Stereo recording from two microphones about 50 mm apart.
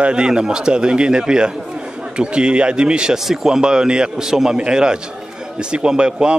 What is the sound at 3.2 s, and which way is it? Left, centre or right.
A man's voice, centre.